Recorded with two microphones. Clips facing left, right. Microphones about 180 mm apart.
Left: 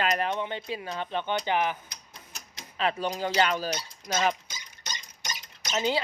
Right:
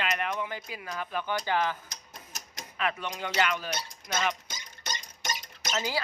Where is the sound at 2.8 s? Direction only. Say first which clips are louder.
Left 4 dB; 30° left (ahead or behind).